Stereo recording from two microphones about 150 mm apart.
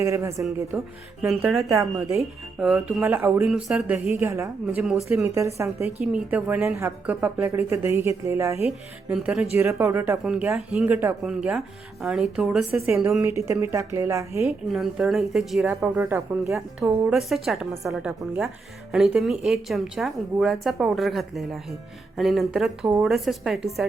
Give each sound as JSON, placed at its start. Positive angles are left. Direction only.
{"t": 0.0, "sound": "a woman's voice", "side_deg": -20}
{"t": 1.2, "sound": "speech", "side_deg": -5}
{"t": 1.7, "sound": "speech", "side_deg": -20}
{"t": 2.6, "sound": "speech", "side_deg": 0}
{"t": 3.0, "sound": "speech", "side_deg": -15}
{"t": 3.4, "sound": "a woman's voice", "side_deg": -5}
{"t": 4.8, "sound": "speech", "side_deg": 0}
{"t": 5.1, "sound": "a woman's voice", "side_deg": -15}
{"t": 9.0, "sound": "a woman's voice", "side_deg": -5}
{"t": 13.2, "sound": "speech", "side_deg": -20}
{"t": 14.4, "sound": "speech", "side_deg": 0}
{"t": 15.7, "sound": "a woman's voice", "side_deg": -10}
{"t": 17.1, "sound": "speech", "side_deg": 0}